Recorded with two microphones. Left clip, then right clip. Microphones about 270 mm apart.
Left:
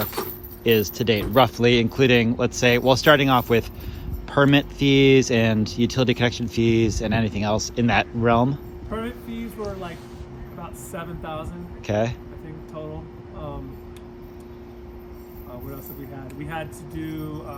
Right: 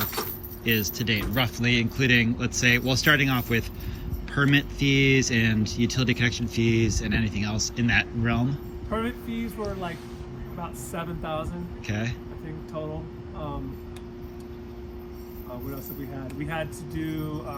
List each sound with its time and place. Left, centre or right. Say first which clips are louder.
0.0 s keys jangling: left 2 dB; left
0.6 s speech: left 7 dB; centre
10.6 s speech: even; centre
16.4 s speech: even; centre